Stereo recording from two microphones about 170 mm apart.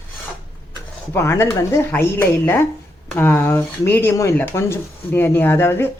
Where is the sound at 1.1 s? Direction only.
15° left (ahead or behind).